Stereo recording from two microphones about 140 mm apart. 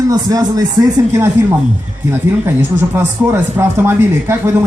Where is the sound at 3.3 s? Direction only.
15° right (ahead or behind).